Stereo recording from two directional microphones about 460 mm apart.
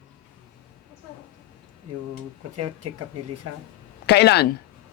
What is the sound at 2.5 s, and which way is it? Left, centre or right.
Speech, right.